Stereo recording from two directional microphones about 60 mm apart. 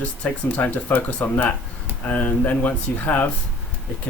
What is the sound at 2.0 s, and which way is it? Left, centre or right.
Speech, left.